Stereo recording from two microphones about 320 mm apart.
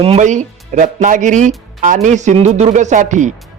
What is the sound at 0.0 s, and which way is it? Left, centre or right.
A man's voice, centre.